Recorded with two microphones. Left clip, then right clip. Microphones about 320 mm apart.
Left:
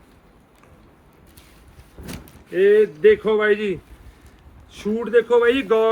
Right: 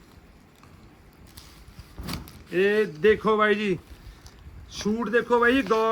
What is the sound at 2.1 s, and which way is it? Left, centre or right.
Speech, centre.